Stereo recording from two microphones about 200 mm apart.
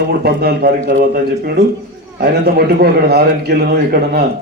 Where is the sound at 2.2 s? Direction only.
50° right (ahead or behind).